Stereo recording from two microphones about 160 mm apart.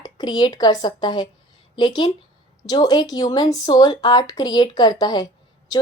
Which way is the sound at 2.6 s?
25° left (ahead or behind).